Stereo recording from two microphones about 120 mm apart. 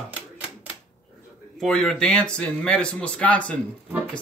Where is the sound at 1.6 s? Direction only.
5° left (ahead or behind).